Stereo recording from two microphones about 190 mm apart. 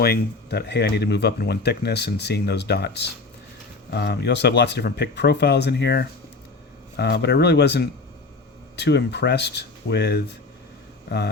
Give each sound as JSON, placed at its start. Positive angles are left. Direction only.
{"t": 0.0, "sound": "speech", "side_deg": 55}